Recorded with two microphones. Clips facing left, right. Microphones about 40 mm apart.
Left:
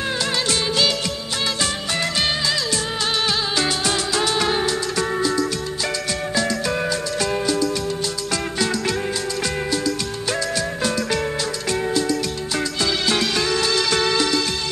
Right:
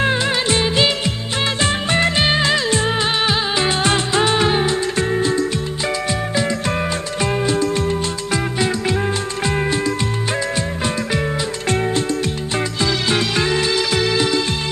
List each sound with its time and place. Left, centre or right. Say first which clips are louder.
0.0 s music of bollywood: right 5 dB; right
6.3 s music: even; right
10.5 s music: right 1 dB; right
12.8 s music: right 2 dB; centre